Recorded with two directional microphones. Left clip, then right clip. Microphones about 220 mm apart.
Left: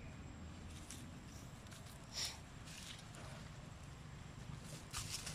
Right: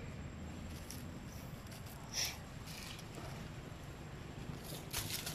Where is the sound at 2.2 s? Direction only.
10° right (ahead or behind).